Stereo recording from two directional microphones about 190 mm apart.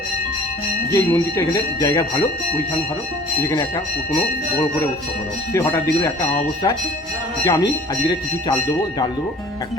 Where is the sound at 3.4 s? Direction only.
15° left (ahead or behind).